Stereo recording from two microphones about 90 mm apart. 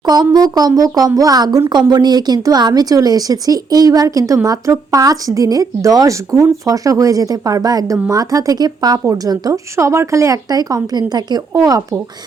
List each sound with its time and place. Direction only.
0.0 s speech: 50° right (ahead or behind)
9.7 s speech: 30° right (ahead or behind)